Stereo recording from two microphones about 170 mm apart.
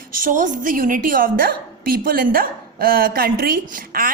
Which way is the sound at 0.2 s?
50° right (ahead or behind).